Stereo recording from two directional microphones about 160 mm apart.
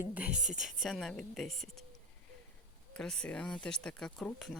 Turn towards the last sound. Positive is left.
turn(degrees=5)  # may be behind; listen again after turning